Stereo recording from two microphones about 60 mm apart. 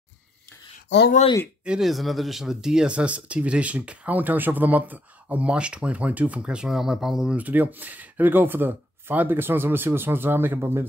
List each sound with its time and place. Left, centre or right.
1.8 s speech: centre; by 6.6 s right
6.6 s speech: centre
7.3 s speech: right